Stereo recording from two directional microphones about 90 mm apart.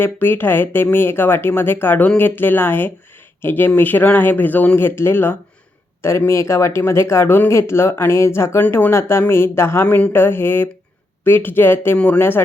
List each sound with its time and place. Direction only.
0.0 s speech: 25° left (ahead or behind)
9.8 s speech: 20° left (ahead or behind)
11.9 s speech: 15° left (ahead or behind)